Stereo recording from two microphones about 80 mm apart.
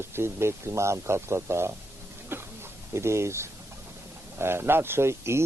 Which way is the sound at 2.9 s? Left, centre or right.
Right.